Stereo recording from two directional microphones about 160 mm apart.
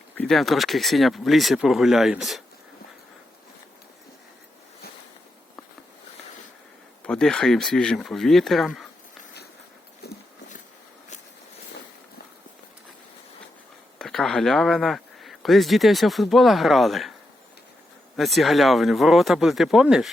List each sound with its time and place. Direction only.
0.2 s speech: centre (ahead or behind)
7.0 s speech: 5° left (ahead or behind)
10.0 s walk: 90° left
14.0 s speech: centre (ahead or behind)
18.2 s speech: centre (ahead or behind)